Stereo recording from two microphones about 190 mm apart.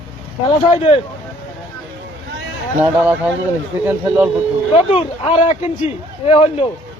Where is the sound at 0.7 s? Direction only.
30° left (ahead or behind).